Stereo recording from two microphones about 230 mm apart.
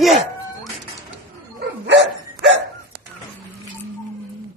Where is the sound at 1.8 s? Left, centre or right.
Right.